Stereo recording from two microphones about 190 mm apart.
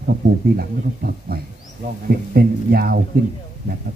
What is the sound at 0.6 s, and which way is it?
Speech, 55° right (ahead or behind).